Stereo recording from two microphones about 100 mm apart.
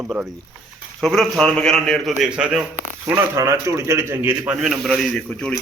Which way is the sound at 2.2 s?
10° right (ahead or behind).